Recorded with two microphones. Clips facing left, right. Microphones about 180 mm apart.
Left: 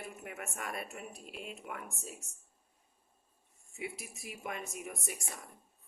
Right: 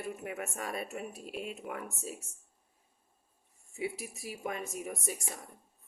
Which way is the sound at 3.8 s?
40° right (ahead or behind).